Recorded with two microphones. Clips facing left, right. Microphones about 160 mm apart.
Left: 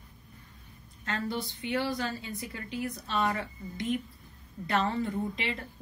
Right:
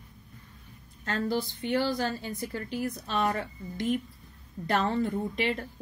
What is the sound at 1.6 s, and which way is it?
A woman's voice, 45° right (ahead or behind).